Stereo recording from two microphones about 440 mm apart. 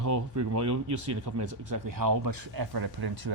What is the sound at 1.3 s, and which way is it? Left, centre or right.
Speech, right.